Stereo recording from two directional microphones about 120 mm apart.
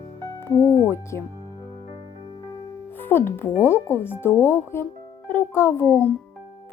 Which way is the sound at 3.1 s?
15° left (ahead or behind).